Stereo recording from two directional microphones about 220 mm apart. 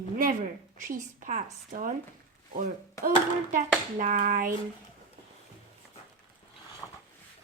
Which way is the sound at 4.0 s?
35° right (ahead or behind).